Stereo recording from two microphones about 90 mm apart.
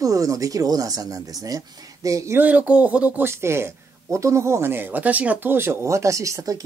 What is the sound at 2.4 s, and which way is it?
Speech, 15° right (ahead or behind).